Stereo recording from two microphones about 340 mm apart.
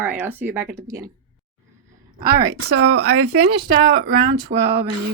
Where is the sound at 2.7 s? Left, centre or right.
Right.